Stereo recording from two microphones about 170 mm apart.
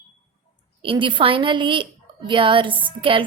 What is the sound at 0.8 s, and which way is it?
A woman's voice, 30° right (ahead or behind).